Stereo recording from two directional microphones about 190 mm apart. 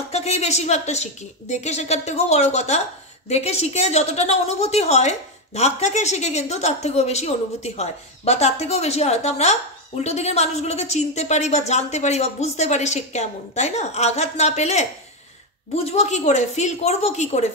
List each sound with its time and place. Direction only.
0.1 s a woman's voice: 35° left (ahead or behind)